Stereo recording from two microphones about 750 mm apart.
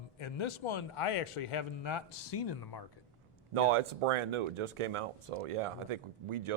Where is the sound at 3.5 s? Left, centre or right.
Right.